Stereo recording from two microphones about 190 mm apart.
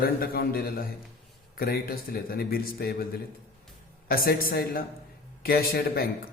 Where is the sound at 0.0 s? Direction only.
50° left (ahead or behind).